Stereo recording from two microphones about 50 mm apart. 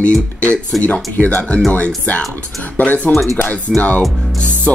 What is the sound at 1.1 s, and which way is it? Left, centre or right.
Speech, left.